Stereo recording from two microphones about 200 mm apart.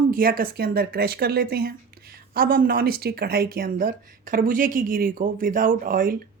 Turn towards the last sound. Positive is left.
turn(degrees=-45)  # may be behind; listen again after turning